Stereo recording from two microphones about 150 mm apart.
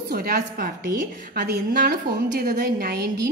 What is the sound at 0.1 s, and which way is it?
A woman's voice, 90° right.